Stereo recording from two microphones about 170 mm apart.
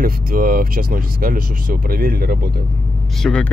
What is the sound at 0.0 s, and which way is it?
Speech, 55° right (ahead or behind).